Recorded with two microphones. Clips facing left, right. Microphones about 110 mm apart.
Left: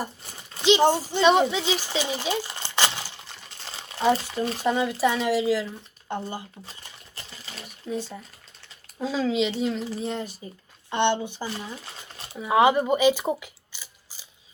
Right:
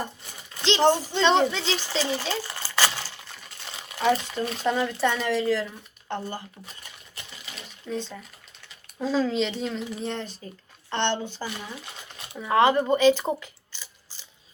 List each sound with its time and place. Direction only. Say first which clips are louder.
0.6 s speech: left 1 dB; 15° left (ahead or behind)
3.3 s boiling: even; 30° left (ahead or behind)
4.6 s speech: left 1 dB; 5° left (ahead or behind)
7.2 s water: left 1 dB; 35° left (ahead or behind)
7.9 s speech: left 1 dB; 10° left (ahead or behind)
11.4 s a sound: left 1 dB; 30° left (ahead or behind)
12.4 s speech: left 1 dB; 10° left (ahead or behind)